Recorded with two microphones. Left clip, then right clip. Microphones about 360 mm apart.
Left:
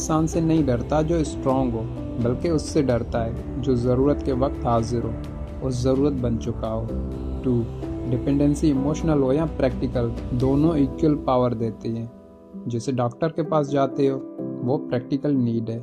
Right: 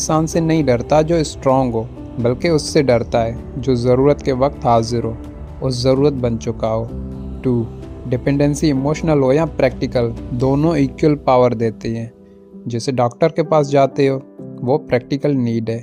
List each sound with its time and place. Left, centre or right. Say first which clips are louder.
0.1 s speech: right 5 dB; right
8.1 s speech: right 6 dB; right